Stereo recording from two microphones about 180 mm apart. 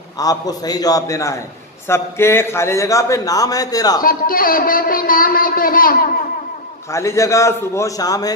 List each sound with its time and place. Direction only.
0.2 s a man's voice: 20° left (ahead or behind)
4.0 s a man's voice: 50° left (ahead or behind)
6.9 s a man's voice: 15° left (ahead or behind)